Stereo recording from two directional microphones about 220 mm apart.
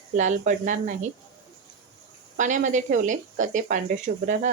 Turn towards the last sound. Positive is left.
turn(degrees=-35)  # may be behind; listen again after turning